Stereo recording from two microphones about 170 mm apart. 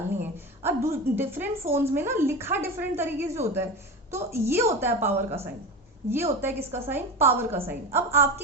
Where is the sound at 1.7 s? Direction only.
15° right (ahead or behind).